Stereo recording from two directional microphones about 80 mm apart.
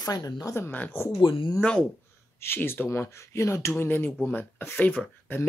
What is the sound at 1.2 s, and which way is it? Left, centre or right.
Speech, left.